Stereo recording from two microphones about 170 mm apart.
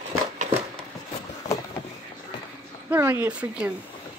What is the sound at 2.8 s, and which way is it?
Speech, 10° right (ahead or behind).